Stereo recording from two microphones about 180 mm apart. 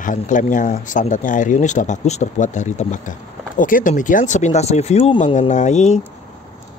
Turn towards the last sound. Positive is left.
turn(degrees=40)  # may be behind; listen again after turning